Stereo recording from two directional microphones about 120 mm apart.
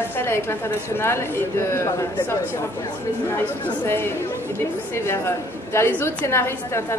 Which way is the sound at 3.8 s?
20° left (ahead or behind).